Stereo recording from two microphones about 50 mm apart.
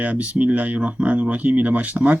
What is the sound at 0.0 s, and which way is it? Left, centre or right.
Speech, right.